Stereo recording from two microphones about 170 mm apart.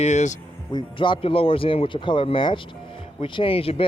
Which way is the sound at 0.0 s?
40° left (ahead or behind).